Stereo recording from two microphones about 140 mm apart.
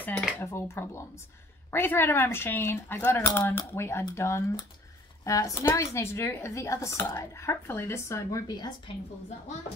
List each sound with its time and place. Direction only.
0.0 s dishes: 5° left (ahead or behind)
0.4 s speech: 20° left (ahead or behind)